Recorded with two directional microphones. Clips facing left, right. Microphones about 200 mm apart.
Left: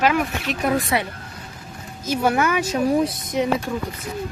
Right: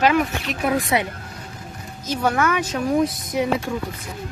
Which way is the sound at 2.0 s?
10° left (ahead or behind).